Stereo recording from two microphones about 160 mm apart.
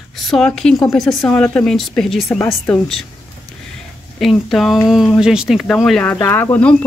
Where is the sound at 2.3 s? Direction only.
15° left (ahead or behind).